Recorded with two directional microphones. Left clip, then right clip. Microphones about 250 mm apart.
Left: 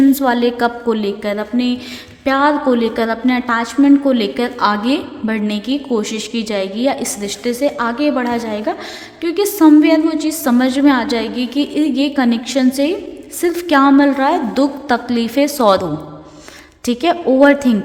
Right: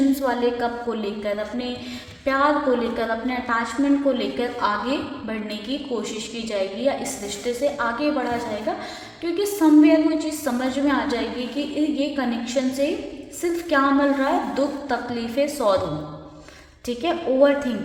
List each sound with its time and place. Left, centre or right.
0.2 s a woman's voice: left
16.8 s a woman's voice: left